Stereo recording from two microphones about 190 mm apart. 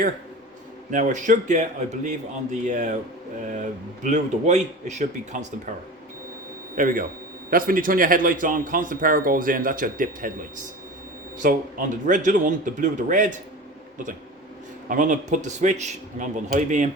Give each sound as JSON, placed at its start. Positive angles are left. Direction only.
{"t": 0.9, "sound": "speech", "side_deg": -40}
{"t": 6.7, "sound": "a man's voice", "side_deg": -45}
{"t": 11.4, "sound": "a man's voice", "side_deg": -45}
{"t": 14.8, "sound": "speech", "side_deg": -45}